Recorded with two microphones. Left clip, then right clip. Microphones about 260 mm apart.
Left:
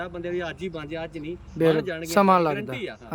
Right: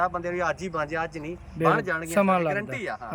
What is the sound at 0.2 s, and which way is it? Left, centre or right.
Speech, centre.